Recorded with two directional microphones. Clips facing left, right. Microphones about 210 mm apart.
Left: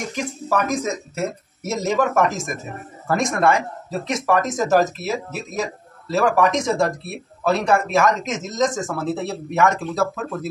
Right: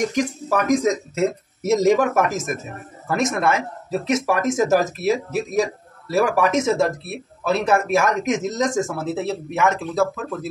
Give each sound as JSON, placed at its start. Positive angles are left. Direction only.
{"t": 0.1, "sound": "speech", "side_deg": -15}